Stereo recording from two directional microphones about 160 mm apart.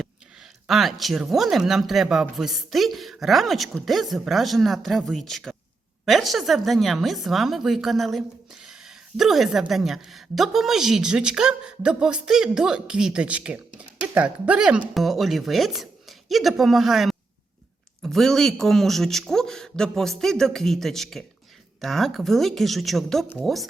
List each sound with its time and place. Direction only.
0.7 s speech: centre (ahead or behind)